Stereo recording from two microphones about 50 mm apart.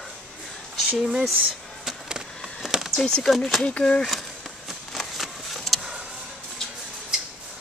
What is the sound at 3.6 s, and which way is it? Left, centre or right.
Speech, left.